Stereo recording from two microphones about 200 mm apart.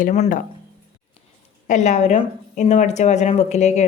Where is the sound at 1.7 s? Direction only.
35° left (ahead or behind).